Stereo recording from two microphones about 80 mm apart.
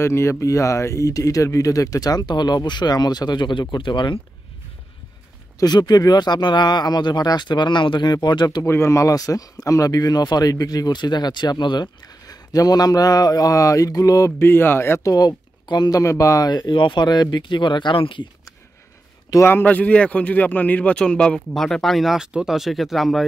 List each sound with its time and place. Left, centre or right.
0.0 s speech: left
5.6 s speech: left
8.6 s speech: left
14.4 s speech: left
15.1 s speech: left
16.0 s speech: left
16.4 s speech: left
19.4 s speech: left; by 23.2 s centre